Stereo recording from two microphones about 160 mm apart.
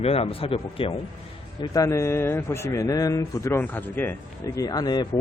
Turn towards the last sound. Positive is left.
turn(degrees=25)  # may be behind; listen again after turning